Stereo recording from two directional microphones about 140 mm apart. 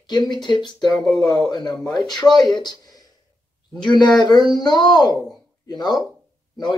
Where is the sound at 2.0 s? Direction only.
30° left (ahead or behind).